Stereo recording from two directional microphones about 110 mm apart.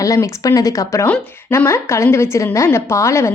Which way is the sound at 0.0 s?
30° left (ahead or behind).